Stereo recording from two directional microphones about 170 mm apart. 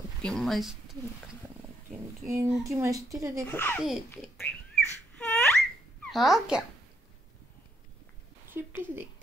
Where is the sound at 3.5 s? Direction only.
10° left (ahead or behind).